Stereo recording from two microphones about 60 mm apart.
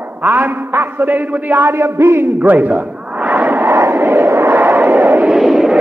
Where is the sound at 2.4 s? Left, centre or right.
Right.